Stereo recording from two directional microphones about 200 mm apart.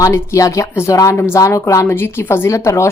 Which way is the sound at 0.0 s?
15° left (ahead or behind).